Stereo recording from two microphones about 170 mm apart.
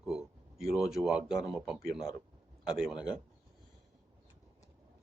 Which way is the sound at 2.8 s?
5° right (ahead or behind).